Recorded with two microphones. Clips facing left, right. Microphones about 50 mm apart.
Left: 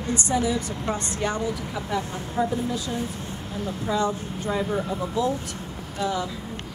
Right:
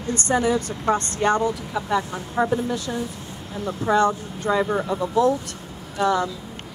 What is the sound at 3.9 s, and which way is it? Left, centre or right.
A woman's voice, right.